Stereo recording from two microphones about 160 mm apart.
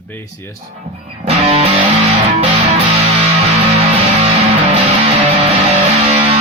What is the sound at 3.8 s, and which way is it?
Music, 40° right (ahead or behind).